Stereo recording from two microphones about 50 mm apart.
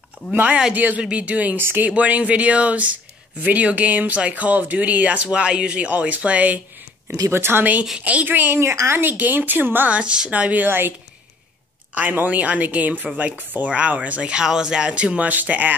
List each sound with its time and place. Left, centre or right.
0.3 s speech: right
7.2 s a woman's voice: right
8.0 s speech: right
8.3 s a woman's voice: right
8.5 s a woman's voice: right
9.2 s speech: right
9.8 s speech: right
10.3 s speech: right
11.9 s speech: right